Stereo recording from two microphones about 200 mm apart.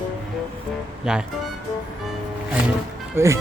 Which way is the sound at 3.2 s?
10° right (ahead or behind).